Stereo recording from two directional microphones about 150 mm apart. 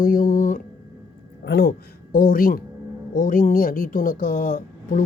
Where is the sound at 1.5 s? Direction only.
90° left.